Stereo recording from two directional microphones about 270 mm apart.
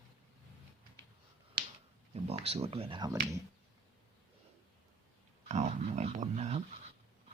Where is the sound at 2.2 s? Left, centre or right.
Right.